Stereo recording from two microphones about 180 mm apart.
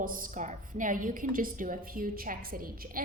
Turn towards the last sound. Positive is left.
turn(degrees=-55)  # may be behind; listen again after turning